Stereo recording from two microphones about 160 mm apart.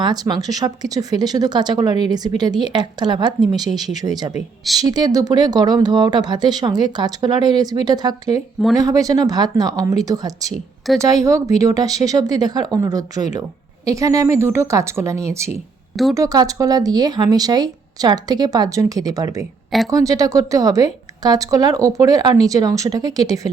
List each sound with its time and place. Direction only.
0.0 s speech: 25° right (ahead or behind)
3.7 s speech: centre (ahead or behind)
3.9 s speech: 25° right (ahead or behind)